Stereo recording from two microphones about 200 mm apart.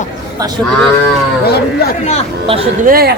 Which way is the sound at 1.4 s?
50° left (ahead or behind).